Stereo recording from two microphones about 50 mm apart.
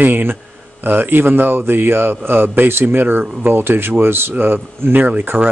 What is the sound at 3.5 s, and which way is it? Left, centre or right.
A man's voice, right.